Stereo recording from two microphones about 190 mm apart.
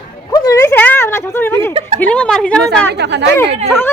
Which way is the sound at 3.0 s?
65° right (ahead or behind).